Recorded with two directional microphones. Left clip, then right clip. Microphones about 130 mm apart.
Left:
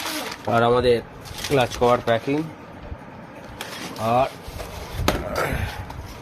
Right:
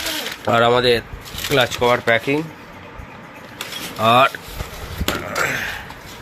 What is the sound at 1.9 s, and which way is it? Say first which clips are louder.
Speech: right 3 dB; centre (ahead or behind).